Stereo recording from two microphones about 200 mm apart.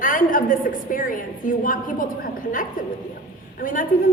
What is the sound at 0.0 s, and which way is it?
A woman's voice, 40° left (ahead or behind).